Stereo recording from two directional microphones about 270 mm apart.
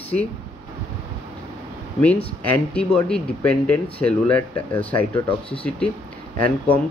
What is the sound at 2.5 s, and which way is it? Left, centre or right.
Speech, centre.